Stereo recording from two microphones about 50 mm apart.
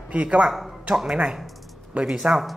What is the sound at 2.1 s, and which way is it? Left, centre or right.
Speech, centre.